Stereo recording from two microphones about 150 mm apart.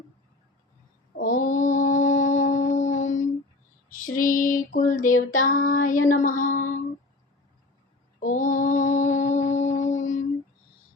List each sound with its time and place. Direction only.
1.1 s mantra: 65° left (ahead or behind)
3.8 s female singing: 65° left (ahead or behind)
8.2 s mantra: 60° left (ahead or behind)